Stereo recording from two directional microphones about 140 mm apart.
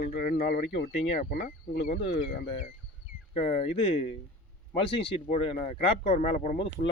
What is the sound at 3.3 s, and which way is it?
Speech, 55° left (ahead or behind).